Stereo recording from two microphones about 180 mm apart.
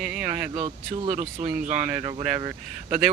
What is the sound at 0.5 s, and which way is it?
Speech, 35° right (ahead or behind).